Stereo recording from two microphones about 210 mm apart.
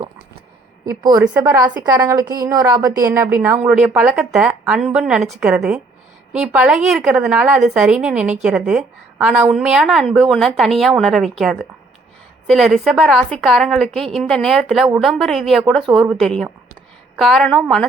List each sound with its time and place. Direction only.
0.9 s speech: 15° right (ahead or behind)
1.5 s a woman's voice: 20° right (ahead or behind); by 17.8 s 5° left (ahead or behind)